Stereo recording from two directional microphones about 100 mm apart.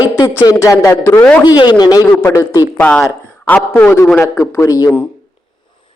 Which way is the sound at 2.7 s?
15° left (ahead or behind).